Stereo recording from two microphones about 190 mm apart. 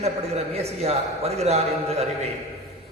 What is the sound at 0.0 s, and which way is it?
A man's voice, 35° right (ahead or behind).